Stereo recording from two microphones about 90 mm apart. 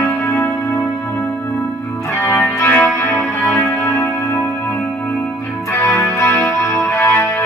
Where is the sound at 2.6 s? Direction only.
20° left (ahead or behind).